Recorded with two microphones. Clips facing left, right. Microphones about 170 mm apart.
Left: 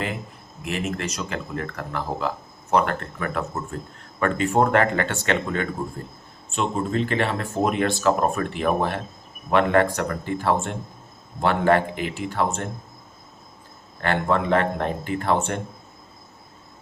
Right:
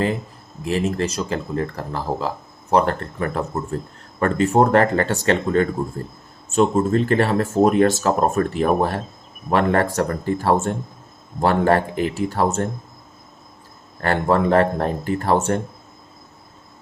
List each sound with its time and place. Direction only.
0.6 s speech: 30° right (ahead or behind)
14.0 s speech: 40° right (ahead or behind)